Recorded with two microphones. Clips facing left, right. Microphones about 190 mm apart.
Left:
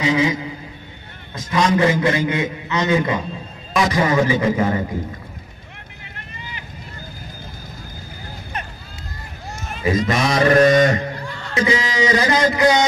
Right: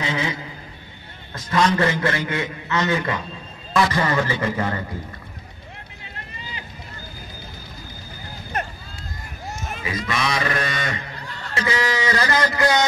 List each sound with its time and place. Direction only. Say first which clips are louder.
0.0 s a man's voice: left 7 dB; 10° left (ahead or behind)
9.8 s a sound: left 7 dB; 45° left (ahead or behind)
11.5 s a man's voice: left 3 dB; 20° left (ahead or behind)